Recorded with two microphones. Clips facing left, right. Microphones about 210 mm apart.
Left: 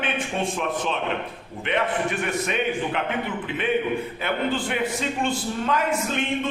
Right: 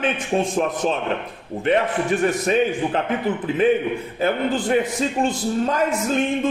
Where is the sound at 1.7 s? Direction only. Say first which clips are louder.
Right 5 dB; 35° right (ahead or behind).